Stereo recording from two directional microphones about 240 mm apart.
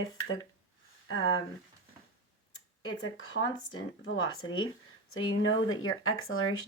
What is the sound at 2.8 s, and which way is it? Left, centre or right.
Speech, left.